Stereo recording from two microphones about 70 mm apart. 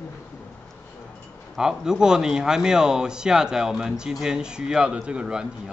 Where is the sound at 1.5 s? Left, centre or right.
Centre.